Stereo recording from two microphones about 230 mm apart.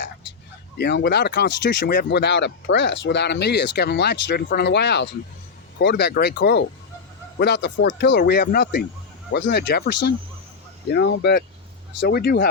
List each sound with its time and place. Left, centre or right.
0.8 s speech: left